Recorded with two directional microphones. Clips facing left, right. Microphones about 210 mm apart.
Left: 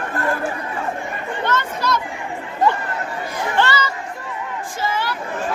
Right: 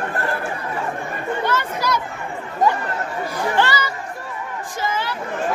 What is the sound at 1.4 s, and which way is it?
Chatter, 10° right (ahead or behind).